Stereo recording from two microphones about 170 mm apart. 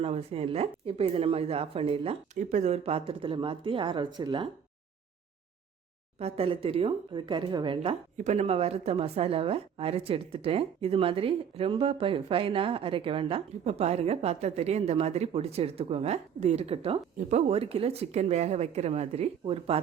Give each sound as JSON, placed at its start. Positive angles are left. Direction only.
{"t": 0.0, "sound": "speech", "side_deg": -35}
{"t": 6.1, "sound": "speech", "side_deg": -35}